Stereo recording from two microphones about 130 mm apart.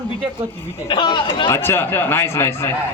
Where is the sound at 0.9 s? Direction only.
35° left (ahead or behind).